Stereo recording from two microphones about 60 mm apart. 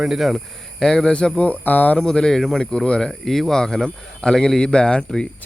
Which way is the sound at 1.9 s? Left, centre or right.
Centre.